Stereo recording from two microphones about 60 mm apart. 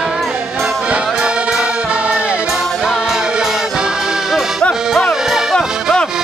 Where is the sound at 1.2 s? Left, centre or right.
Centre.